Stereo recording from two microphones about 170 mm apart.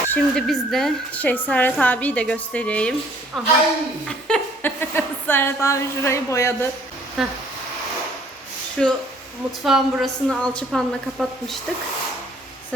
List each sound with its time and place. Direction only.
0.1 s a woman's voice: centre (ahead or behind)
4.3 s a woman's voice: 10° left (ahead or behind)
7.2 s a woman's voice: centre (ahead or behind)
8.8 s a woman's voice: 5° left (ahead or behind)